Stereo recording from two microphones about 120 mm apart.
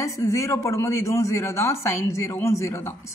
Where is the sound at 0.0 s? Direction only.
25° left (ahead or behind).